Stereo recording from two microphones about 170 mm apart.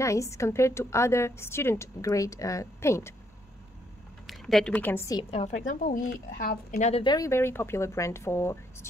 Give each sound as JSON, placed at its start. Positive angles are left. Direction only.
{"t": 0.0, "sound": "a woman's voice", "side_deg": 15}
{"t": 4.3, "sound": "a woman's voice", "side_deg": 0}
{"t": 5.8, "sound": "speech", "side_deg": 55}
{"t": 6.8, "sound": "speech", "side_deg": 35}
{"t": 7.1, "sound": "a woman's voice", "side_deg": 20}